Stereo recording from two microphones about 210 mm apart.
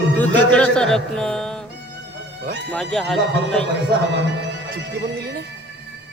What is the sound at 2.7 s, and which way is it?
Speech, centre (ahead or behind).